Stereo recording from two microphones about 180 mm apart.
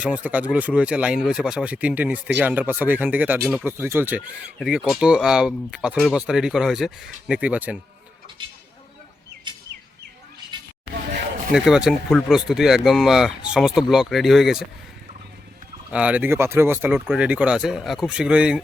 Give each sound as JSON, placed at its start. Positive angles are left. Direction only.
{"t": 0.0, "sound": "speech", "side_deg": -10}
{"t": 8.4, "sound": "a sound", "side_deg": -30}
{"t": 11.5, "sound": "speech", "side_deg": -5}
{"t": 15.9, "sound": "speech", "side_deg": -5}